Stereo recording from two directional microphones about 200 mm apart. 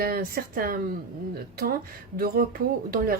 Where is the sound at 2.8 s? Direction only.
45° right (ahead or behind).